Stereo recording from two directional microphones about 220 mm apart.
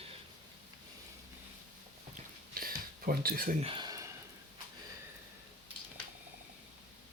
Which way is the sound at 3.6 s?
25° right (ahead or behind).